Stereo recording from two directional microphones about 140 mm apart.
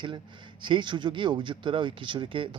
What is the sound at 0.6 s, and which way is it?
Speech, 35° right (ahead or behind).